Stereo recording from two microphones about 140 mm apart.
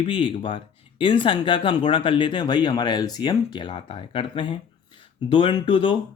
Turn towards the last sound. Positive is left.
turn(degrees=35)  # may be behind; listen again after turning